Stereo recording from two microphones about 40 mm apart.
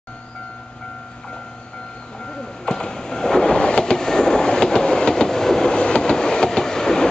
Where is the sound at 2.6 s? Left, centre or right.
Centre.